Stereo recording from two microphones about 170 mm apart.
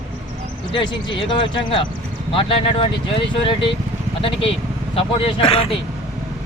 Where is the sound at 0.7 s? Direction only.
30° left (ahead or behind).